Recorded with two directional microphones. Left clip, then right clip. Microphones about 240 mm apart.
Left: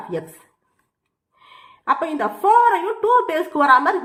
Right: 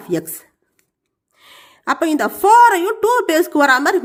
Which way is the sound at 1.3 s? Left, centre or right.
Right.